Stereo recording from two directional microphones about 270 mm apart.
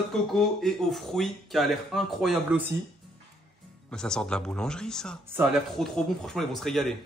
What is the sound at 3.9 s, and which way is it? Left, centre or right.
Speech, centre.